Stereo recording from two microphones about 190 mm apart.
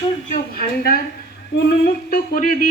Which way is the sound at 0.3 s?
50° left (ahead or behind).